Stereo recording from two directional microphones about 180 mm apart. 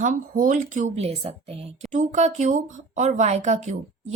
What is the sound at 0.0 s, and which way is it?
A woman's voice, 45° right (ahead or behind).